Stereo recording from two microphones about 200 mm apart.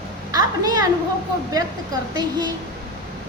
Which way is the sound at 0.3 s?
20° right (ahead or behind).